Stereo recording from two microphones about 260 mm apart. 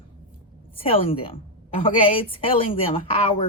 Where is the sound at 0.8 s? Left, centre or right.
Left.